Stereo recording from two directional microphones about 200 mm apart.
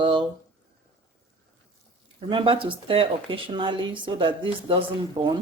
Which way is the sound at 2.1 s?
25° right (ahead or behind).